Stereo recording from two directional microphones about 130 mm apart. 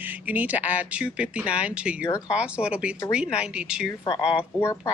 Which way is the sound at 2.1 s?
20° left (ahead or behind).